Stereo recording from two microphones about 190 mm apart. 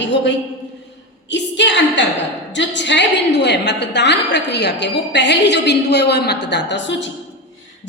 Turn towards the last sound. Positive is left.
turn(degrees=70)  # may be behind; listen again after turning